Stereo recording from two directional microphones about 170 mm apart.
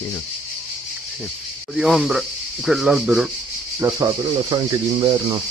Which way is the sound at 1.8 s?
Centre (ahead or behind).